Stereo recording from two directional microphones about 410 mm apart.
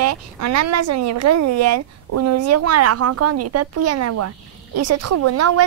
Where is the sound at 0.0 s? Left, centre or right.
Right.